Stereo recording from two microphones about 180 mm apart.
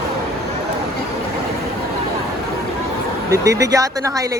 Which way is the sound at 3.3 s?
15° right (ahead or behind).